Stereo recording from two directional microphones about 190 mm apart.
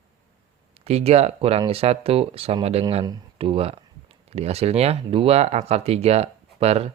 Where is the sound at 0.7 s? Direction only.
35° right (ahead or behind).